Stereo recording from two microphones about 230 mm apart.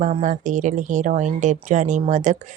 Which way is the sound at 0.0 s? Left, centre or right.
Right.